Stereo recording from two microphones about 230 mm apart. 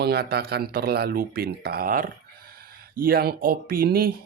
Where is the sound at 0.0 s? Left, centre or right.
Right.